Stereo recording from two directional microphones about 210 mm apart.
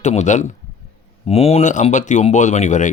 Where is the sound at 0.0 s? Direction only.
35° left (ahead or behind).